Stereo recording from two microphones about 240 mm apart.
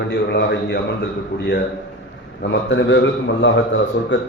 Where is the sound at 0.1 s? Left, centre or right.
Left.